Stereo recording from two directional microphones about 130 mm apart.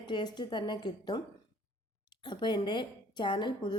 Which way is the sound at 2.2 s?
35° left (ahead or behind).